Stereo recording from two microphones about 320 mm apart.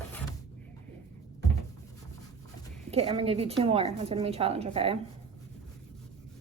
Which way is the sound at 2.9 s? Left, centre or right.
Centre.